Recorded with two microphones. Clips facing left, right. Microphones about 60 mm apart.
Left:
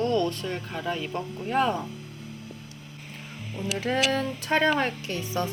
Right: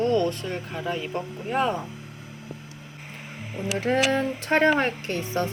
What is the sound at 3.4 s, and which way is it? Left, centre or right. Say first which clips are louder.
Speech: right 2 dB; right.